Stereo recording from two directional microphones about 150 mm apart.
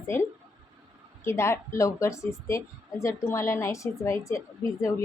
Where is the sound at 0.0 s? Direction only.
15° left (ahead or behind).